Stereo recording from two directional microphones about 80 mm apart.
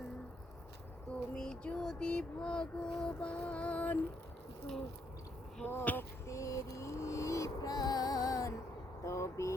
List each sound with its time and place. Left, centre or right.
1.4 s child singing: centre
5.6 s speech: left
6.2 s vehicle: left
9.0 s a sound: left